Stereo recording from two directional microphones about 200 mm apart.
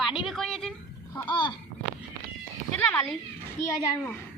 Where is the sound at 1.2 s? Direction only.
25° left (ahead or behind).